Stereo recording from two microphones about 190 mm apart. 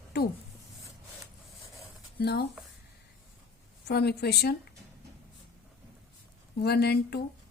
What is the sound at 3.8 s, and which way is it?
Speech, 60° left (ahead or behind).